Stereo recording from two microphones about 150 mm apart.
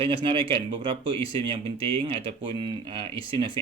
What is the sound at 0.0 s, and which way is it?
Speech, 35° right (ahead or behind).